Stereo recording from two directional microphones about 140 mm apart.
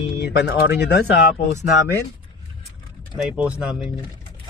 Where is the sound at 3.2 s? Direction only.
10° right (ahead or behind).